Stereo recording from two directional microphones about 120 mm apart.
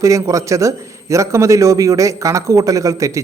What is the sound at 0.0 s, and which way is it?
A man's voice, 25° right (ahead or behind).